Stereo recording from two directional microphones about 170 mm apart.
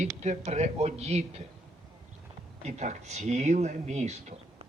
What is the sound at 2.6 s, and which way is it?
Speech, 40° right (ahead or behind).